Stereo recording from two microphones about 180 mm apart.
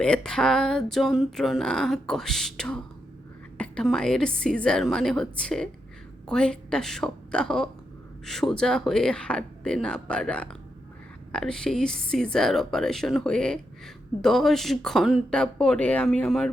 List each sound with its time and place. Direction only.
0.0 s a woman's voice: 5° left (ahead or behind)